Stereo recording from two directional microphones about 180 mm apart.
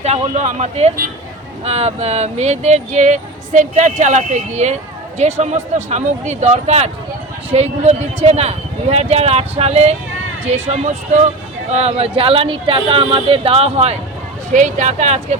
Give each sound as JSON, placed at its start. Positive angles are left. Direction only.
{"t": 0.0, "sound": "speech", "side_deg": -40}